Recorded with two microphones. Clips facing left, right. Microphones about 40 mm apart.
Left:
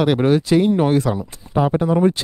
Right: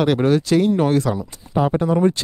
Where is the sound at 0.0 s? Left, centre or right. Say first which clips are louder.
Left 1 dB; centre.